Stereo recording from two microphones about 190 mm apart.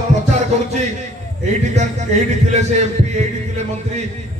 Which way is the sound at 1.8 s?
35° right (ahead or behind).